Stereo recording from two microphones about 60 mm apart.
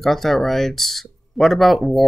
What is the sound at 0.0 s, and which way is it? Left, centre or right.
Speech, centre.